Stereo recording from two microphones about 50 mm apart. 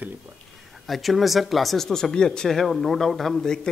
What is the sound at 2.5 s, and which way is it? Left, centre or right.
Speech, centre.